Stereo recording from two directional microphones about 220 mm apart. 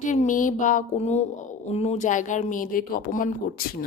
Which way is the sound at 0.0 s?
35° left (ahead or behind).